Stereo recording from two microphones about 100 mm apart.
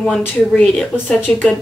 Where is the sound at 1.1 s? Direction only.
20° left (ahead or behind).